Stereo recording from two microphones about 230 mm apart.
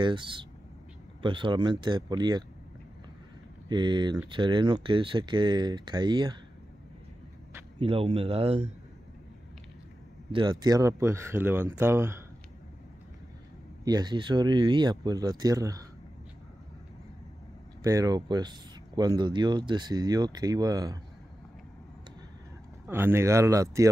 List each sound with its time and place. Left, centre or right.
0.0 s speech: right
3.6 s speech: centre
7.8 s speech: right
10.3 s speech: centre
13.8 s speech: centre
17.8 s speech: centre
22.8 s speech: centre